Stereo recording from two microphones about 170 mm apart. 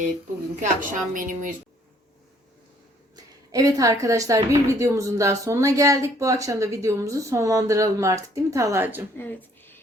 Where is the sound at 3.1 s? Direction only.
20° right (ahead or behind).